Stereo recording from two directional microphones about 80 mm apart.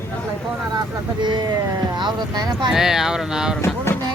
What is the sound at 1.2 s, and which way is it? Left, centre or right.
Speech, right.